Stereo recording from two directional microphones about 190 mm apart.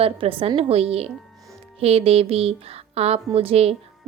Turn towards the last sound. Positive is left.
turn(degrees=-30)  # may be behind; listen again after turning